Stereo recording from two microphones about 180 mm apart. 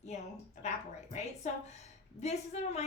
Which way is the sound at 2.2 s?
40° left (ahead or behind).